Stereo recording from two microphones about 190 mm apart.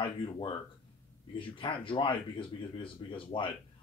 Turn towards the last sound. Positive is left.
turn(degrees=25)  # may be behind; listen again after turning